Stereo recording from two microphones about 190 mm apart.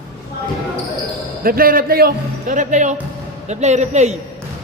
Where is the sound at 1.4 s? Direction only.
50° right (ahead or behind).